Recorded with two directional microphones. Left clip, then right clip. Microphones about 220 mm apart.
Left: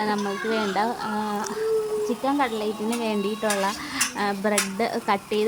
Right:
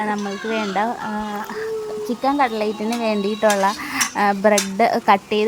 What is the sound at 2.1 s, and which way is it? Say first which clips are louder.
Dishes: right 5 dB; 25° right (ahead or behind).